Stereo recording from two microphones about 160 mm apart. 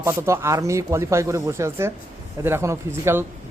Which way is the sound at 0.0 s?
15° right (ahead or behind).